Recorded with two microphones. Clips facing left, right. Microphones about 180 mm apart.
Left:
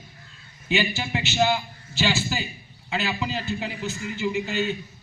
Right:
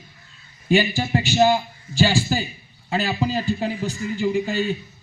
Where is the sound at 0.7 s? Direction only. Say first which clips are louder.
Right 6 dB; 40° right (ahead or behind).